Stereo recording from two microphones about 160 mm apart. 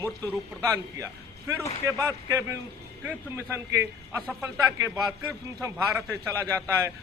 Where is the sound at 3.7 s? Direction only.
15° right (ahead or behind).